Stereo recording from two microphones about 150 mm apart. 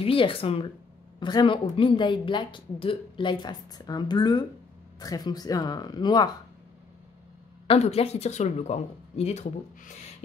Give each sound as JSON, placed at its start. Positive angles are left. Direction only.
{"t": 0.0, "sound": "a woman's voice", "side_deg": 35}
{"t": 7.6, "sound": "speech", "side_deg": 45}